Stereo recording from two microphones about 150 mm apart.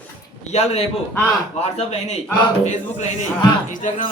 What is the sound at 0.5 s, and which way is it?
Speech, 45° left (ahead or behind).